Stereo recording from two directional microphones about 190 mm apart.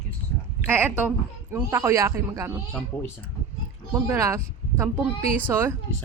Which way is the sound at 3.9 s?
15° right (ahead or behind).